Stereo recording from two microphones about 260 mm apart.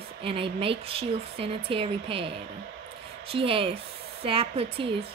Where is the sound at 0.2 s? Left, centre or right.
Right.